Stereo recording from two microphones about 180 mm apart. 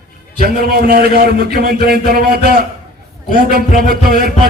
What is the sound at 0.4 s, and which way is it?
A man's voice, 55° right (ahead or behind).